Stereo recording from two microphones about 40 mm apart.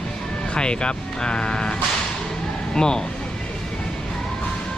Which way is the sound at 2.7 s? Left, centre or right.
Centre.